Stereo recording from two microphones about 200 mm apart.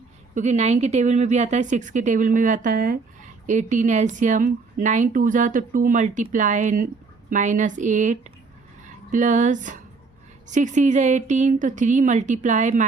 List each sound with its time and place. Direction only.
0.3 s a woman's voice: 35° right (ahead or behind)